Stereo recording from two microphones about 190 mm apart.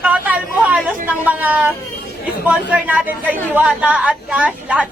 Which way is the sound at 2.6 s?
5° right (ahead or behind).